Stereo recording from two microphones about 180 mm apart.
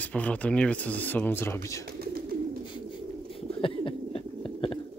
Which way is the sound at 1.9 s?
60° right (ahead or behind).